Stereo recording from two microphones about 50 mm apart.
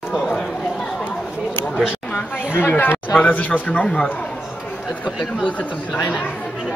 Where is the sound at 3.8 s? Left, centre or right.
Centre.